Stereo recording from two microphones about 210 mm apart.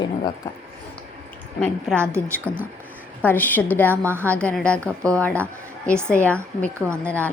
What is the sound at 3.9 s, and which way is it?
Speech, 10° right (ahead or behind).